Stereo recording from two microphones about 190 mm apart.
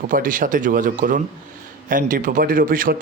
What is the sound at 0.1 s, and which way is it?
Speech, 45° right (ahead or behind).